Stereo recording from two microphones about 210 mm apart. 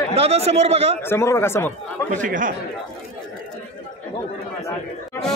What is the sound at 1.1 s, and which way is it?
Speech, 10° left (ahead or behind).